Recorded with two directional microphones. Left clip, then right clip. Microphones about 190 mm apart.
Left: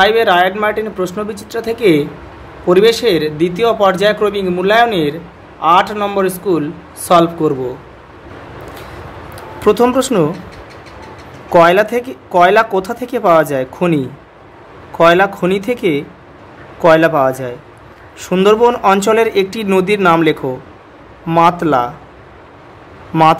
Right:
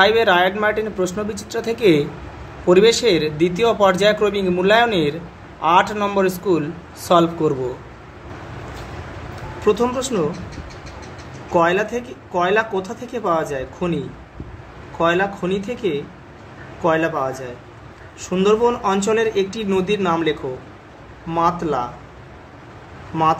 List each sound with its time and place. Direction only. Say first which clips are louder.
0.0 s a man's voice: left 4 dB; 10° left (ahead or behind)
9.7 s speech: left 7 dB; 55° left (ahead or behind)
11.5 s speech: left 8 dB; 55° left (ahead or behind)